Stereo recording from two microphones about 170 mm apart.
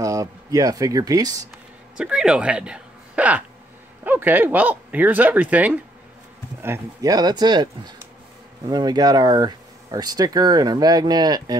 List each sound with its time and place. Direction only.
0.0 s speech: 20° right (ahead or behind)
2.0 s speech: 5° right (ahead or behind); by 11.5 s 25° right (ahead or behind)